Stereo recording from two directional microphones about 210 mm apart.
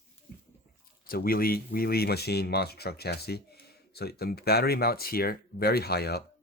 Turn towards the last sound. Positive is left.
turn(degrees=50)  # may be behind; listen again after turning